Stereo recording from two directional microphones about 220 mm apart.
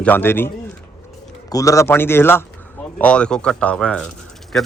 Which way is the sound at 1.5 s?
15° left (ahead or behind).